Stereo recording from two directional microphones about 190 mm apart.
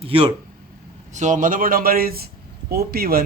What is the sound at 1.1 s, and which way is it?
Speech, 40° right (ahead or behind).